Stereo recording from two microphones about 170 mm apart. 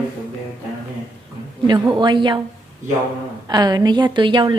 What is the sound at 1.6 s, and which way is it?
Speech, 25° right (ahead or behind).